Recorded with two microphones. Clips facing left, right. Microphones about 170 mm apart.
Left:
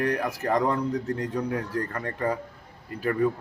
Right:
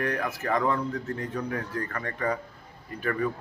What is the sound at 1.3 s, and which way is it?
Speech, 10° left (ahead or behind).